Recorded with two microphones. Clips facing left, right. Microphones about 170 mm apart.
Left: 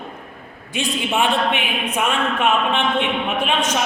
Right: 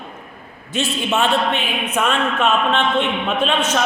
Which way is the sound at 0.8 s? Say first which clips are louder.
Right 1 dB; 15° left (ahead or behind).